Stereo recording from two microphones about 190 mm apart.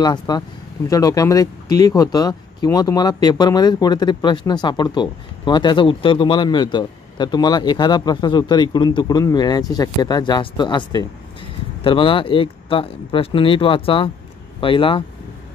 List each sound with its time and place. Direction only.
0.0 s speech: 20° left (ahead or behind)